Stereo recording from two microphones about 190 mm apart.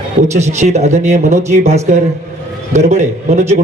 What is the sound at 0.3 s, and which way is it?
Speech, 35° right (ahead or behind).